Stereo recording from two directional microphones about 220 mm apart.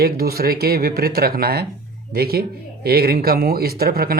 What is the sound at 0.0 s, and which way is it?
Speech, 45° right (ahead or behind).